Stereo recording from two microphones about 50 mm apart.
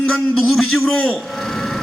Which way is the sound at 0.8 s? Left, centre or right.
Left.